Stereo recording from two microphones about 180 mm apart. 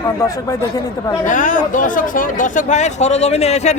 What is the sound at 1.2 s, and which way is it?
Speech, 45° left (ahead or behind).